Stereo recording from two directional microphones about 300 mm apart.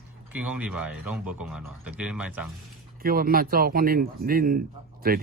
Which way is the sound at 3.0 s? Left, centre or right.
Right.